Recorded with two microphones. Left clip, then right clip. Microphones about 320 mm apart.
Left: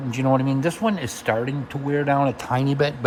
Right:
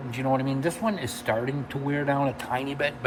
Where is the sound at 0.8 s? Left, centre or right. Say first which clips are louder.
Left 4 dB; centre.